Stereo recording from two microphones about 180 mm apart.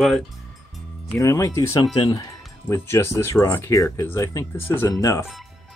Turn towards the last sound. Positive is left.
turn(degrees=20)  # may be behind; listen again after turning